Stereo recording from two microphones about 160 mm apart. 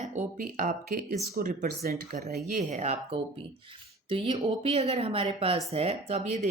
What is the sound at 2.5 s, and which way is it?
Speech, 50° right (ahead or behind).